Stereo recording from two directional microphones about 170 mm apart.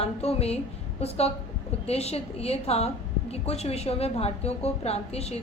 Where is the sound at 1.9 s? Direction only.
35° left (ahead or behind).